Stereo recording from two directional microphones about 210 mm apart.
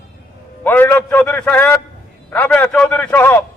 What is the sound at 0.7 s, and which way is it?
A man's voice, 10° left (ahead or behind).